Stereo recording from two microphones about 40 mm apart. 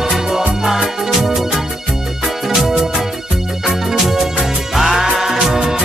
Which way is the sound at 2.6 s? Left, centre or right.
Centre.